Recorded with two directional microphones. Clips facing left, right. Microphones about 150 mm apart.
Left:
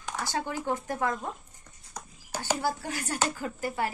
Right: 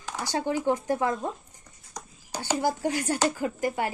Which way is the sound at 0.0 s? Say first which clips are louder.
Right 3 dB; 15° right (ahead or behind).